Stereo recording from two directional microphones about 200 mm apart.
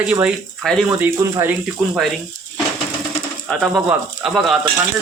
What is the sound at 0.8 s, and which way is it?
Speech, 10° right (ahead or behind).